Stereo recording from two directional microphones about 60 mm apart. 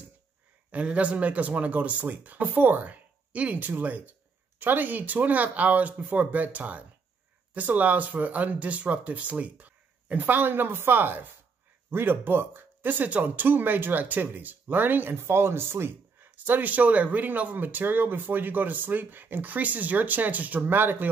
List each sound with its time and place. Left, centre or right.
0.7 s speech: right